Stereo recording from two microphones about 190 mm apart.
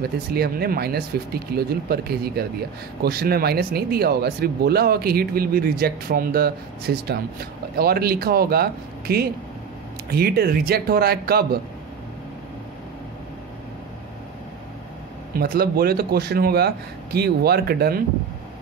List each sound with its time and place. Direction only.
0.0 s speech: 55° right (ahead or behind)
15.3 s speech: 50° right (ahead or behind)